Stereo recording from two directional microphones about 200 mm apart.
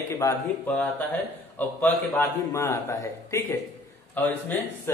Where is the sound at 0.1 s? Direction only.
15° left (ahead or behind).